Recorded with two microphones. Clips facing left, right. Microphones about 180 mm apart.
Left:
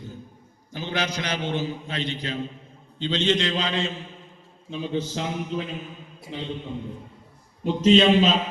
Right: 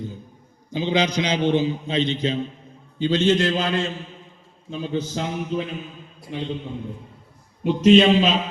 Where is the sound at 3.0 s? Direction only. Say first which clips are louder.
Right 5 dB; 10° right (ahead or behind).